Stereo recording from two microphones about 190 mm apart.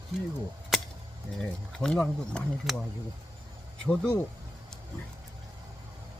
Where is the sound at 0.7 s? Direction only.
Centre (ahead or behind).